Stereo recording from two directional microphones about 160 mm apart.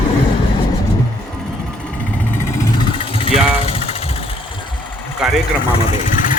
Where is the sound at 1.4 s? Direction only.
5° left (ahead or behind).